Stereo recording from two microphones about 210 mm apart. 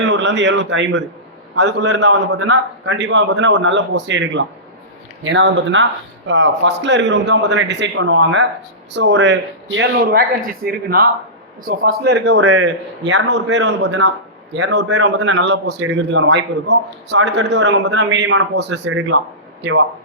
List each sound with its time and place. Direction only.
0.1 s a man's voice: 55° right (ahead or behind)